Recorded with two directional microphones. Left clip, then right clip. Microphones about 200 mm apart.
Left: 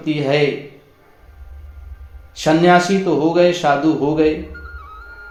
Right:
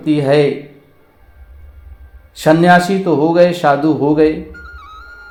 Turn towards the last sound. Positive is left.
turn(degrees=-30)  # may be behind; listen again after turning